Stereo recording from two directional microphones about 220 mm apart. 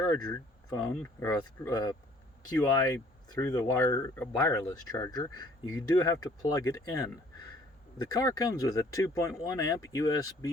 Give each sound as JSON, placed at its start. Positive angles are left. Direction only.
{"t": 0.0, "sound": "speech", "side_deg": 15}